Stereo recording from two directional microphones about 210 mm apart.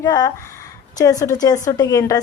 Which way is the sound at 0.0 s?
20° left (ahead or behind).